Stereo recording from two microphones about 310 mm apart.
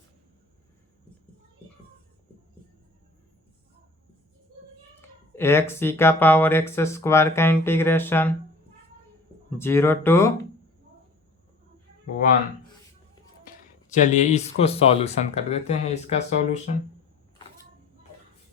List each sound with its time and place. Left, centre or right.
4.9 s speech: centre
9.5 s speech: centre
13.9 s speech: left